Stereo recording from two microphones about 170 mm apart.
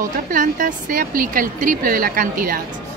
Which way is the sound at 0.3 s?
50° right (ahead or behind).